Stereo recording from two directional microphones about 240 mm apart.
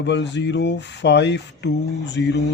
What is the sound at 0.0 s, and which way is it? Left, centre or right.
Speech, left.